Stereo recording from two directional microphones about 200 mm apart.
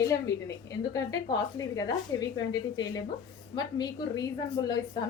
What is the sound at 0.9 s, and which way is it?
A woman's voice, 15° left (ahead or behind).